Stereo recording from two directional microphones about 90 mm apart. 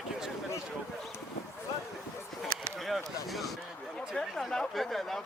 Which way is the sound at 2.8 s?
Centre (ahead or behind).